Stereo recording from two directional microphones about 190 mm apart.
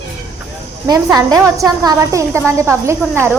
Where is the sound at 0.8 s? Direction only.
20° right (ahead or behind).